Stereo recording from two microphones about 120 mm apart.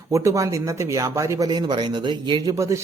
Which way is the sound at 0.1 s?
25° right (ahead or behind).